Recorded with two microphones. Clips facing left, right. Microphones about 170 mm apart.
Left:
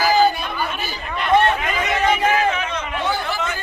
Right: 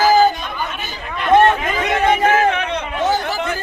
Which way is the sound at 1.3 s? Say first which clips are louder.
Right 4 dB; 55° right (ahead or behind).